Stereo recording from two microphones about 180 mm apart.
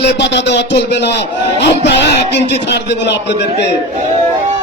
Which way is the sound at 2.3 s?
70° left (ahead or behind).